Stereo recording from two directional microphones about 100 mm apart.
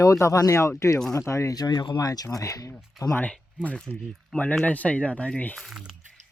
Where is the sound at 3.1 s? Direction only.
10° left (ahead or behind).